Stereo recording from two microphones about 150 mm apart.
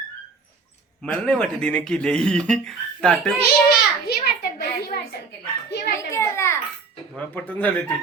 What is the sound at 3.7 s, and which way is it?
A child's voice, 90° left.